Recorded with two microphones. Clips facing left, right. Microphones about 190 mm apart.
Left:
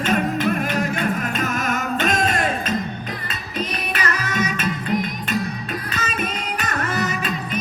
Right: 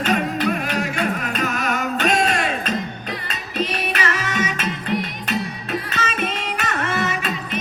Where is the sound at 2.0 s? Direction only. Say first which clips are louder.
Right 2 dB; 45° left (ahead or behind).